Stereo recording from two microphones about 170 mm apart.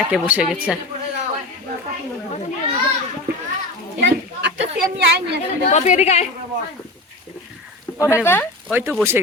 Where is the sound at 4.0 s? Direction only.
90° right.